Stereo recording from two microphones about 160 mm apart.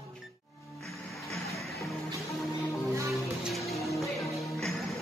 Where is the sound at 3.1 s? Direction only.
Centre (ahead or behind).